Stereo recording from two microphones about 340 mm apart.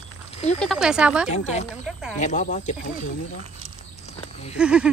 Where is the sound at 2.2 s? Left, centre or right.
Left.